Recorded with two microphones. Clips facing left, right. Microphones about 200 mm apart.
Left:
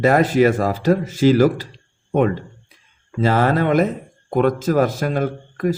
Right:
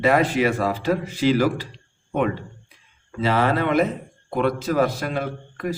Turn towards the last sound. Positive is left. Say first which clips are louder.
# left 6 dB
turn(degrees=45)  # may be behind; listen again after turning